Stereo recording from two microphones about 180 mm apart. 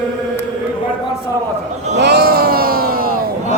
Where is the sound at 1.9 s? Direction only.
65° right (ahead or behind).